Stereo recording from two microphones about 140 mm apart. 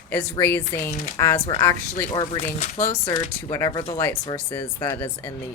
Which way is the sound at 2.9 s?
45° left (ahead or behind).